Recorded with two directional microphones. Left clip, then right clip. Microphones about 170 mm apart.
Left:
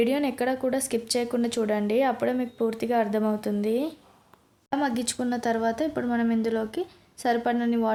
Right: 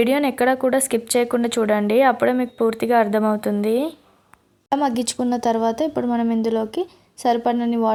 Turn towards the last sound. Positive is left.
turn(degrees=-25)  # may be behind; listen again after turning